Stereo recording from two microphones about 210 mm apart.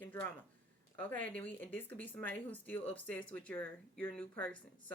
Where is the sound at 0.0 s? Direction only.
10° left (ahead or behind).